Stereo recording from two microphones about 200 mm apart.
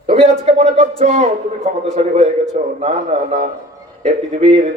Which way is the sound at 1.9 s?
35° right (ahead or behind).